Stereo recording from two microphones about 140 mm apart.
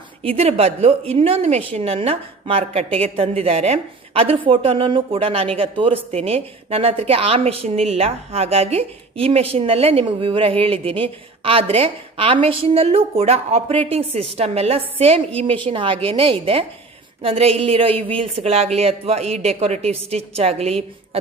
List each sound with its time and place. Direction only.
0.2 s speech: 45° right (ahead or behind)